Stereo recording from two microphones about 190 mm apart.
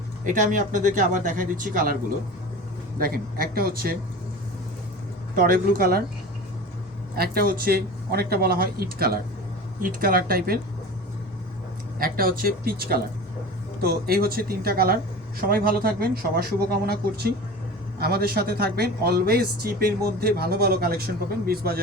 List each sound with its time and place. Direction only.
0.3 s speech: 45° right (ahead or behind)
3.0 s speech: 50° right (ahead or behind)
5.3 s speech: 45° right (ahead or behind)
7.2 s speech: 50° right (ahead or behind)
11.9 s speech: 50° right (ahead or behind)